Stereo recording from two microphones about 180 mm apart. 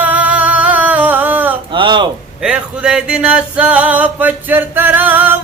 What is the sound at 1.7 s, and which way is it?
Speech, 25° right (ahead or behind).